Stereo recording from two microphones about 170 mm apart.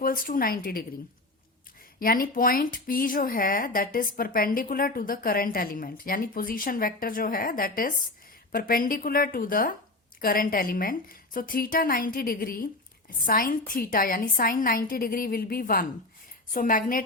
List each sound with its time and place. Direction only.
0.0 s speech: 55° left (ahead or behind)
2.0 s a woman's voice: 60° left (ahead or behind)